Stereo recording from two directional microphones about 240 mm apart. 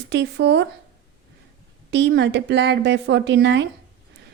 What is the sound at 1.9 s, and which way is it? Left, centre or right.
A woman's voice, right.